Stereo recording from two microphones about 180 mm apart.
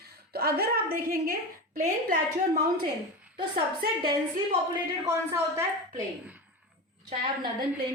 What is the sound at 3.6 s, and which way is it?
Speech, 25° right (ahead or behind).